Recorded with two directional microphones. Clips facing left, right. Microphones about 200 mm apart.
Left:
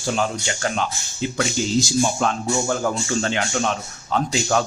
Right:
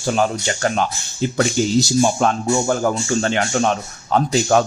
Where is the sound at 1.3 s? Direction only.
50° right (ahead or behind).